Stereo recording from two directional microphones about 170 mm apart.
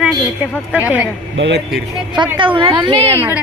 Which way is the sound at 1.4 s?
85° right.